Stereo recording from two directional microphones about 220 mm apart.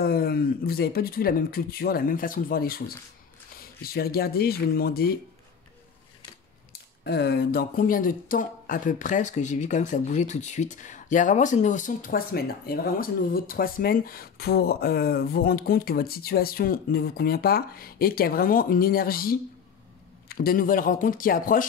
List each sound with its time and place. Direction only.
0.0 s speech: 45° left (ahead or behind)
3.8 s speech: 45° left (ahead or behind)
6.7 s speech: 45° left (ahead or behind)